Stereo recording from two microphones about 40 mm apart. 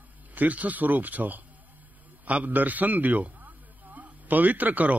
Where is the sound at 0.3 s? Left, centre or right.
Right.